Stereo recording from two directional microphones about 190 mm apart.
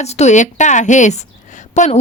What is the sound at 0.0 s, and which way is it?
A woman's voice, 35° left (ahead or behind).